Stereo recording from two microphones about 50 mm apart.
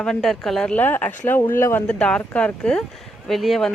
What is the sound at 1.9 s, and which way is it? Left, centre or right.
Speech, centre.